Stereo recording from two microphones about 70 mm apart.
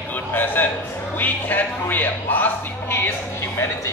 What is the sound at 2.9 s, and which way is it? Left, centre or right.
Music, left.